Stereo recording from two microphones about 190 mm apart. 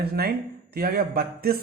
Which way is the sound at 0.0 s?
55° right (ahead or behind).